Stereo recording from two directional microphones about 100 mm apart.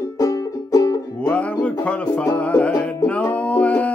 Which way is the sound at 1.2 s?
10° left (ahead or behind).